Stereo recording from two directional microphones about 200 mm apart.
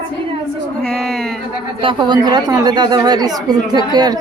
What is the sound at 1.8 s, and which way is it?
Speech, 25° right (ahead or behind).